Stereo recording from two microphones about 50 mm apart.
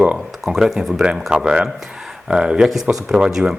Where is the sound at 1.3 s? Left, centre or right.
Centre.